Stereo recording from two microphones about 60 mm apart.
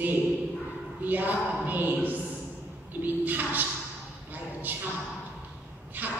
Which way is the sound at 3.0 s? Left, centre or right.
Right.